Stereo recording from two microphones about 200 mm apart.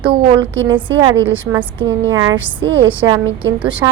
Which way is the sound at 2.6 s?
25° right (ahead or behind).